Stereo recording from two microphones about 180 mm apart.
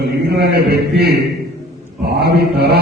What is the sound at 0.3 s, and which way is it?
A man's voice, 65° right (ahead or behind).